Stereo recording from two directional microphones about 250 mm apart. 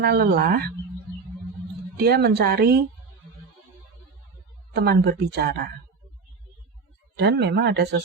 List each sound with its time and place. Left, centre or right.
0.0 s speech: right
2.0 s speech: right
4.7 s speech: right
7.2 s speech: right